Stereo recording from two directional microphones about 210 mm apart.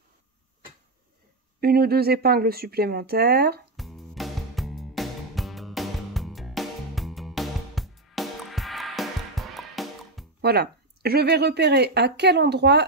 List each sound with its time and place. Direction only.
1.6 s speech: 45° right (ahead or behind)
3.7 s music: centre (ahead or behind)
10.4 s speech: 50° right (ahead or behind)